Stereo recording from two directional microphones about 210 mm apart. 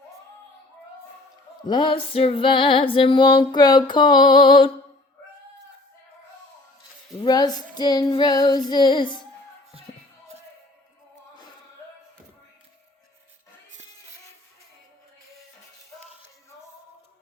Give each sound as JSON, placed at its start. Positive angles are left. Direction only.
{"t": 1.6, "sound": "music", "side_deg": 20}
{"t": 7.2, "sound": "music", "side_deg": 20}